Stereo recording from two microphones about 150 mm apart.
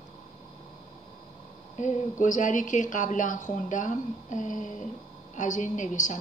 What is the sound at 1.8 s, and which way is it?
A woman's voice, 55° left (ahead or behind).